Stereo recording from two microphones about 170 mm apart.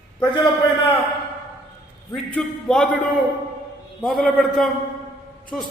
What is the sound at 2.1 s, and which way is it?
Speech, 5° left (ahead or behind).